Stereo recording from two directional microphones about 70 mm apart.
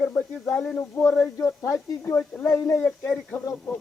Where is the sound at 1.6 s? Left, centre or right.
Left.